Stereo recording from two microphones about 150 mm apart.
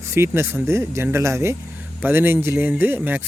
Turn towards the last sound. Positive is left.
turn(degrees=-15)  # may be behind; listen again after turning